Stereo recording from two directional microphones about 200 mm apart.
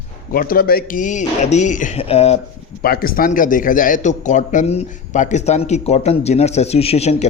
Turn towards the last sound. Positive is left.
turn(degrees=30)  # may be behind; listen again after turning